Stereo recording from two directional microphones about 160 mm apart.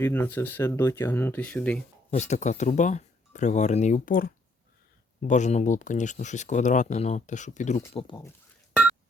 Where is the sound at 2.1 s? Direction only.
45° left (ahead or behind); by 4.3 s 60° left (ahead or behind).